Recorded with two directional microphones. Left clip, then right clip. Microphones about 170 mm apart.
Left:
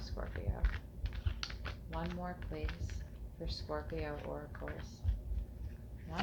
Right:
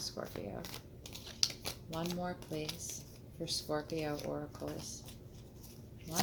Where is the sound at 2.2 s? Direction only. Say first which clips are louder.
Right 4 dB; 45° right (ahead or behind).